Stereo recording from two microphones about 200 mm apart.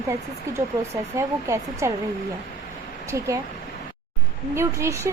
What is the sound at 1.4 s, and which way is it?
Speech, 15° right (ahead or behind).